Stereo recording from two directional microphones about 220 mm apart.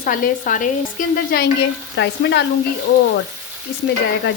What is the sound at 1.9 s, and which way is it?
Speech, 55° left (ahead or behind).